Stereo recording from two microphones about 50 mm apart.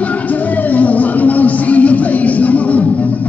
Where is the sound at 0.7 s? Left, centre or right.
Left.